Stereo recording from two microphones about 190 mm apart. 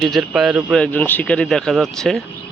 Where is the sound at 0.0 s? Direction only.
Centre (ahead or behind).